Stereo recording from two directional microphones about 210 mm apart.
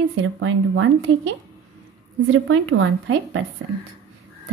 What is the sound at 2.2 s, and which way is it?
Speech, 75° right (ahead or behind).